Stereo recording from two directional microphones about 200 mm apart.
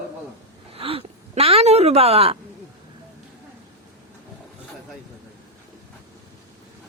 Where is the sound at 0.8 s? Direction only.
30° right (ahead or behind).